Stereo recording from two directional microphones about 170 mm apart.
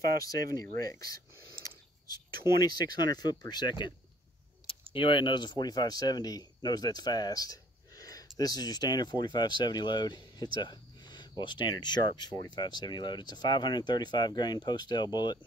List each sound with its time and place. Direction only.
0.2 s speech: 20° left (ahead or behind)
2.4 s speech: 25° left (ahead or behind)